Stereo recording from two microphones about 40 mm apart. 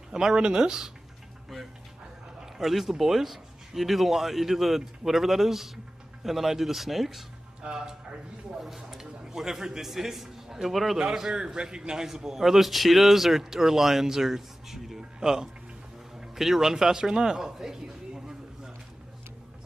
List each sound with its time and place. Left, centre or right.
0.1 s a man's voice: centre
2.4 s a man's voice: centre
7.6 s a man's voice: centre
11.0 s a man's voice: centre